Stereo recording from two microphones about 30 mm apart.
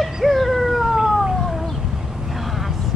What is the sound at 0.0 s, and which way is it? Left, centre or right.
Cat, centre.